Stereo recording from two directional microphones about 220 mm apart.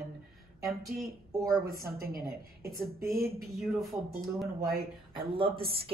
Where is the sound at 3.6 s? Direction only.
Centre (ahead or behind).